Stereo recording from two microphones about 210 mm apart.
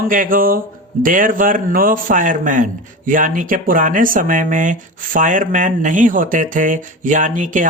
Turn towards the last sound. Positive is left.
turn(degrees=-40)  # may be behind; listen again after turning